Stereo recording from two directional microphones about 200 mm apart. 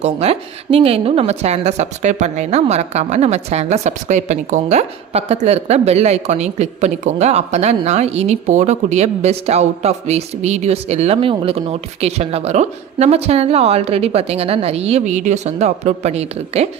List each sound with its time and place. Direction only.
0.0 s a woman's voice: 30° right (ahead or behind)